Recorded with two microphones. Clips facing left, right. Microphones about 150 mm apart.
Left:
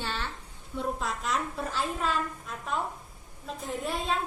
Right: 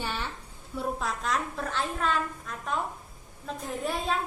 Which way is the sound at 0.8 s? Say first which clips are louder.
Right 1 dB; centre (ahead or behind).